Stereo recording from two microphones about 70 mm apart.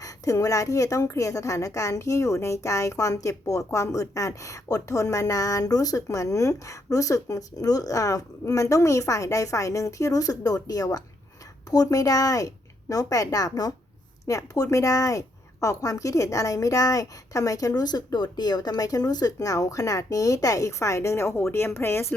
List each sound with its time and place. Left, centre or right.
0.0 s a woman's voice: left